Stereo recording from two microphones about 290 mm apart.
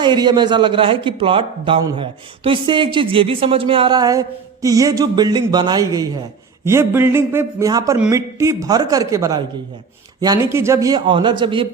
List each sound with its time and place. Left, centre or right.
0.0 s speech: centre